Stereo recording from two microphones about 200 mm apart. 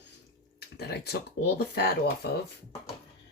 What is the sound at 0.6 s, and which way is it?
Speech, 55° left (ahead or behind).